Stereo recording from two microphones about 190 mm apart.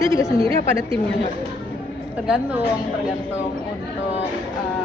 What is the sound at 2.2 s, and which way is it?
Speech, 5° right (ahead or behind).